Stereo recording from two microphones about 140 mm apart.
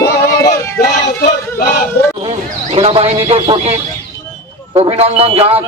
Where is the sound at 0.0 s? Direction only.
20° left (ahead or behind).